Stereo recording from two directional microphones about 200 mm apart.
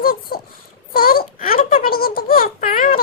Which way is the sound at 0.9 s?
45° left (ahead or behind).